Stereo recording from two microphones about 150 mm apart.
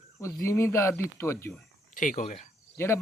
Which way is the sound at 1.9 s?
60° left (ahead or behind).